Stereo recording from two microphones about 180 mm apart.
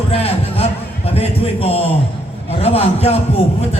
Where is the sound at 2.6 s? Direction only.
35° left (ahead or behind).